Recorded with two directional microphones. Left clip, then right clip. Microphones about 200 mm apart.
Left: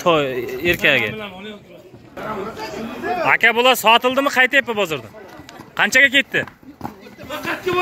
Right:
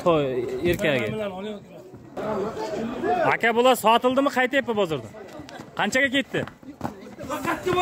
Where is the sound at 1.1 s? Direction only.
60° right (ahead or behind).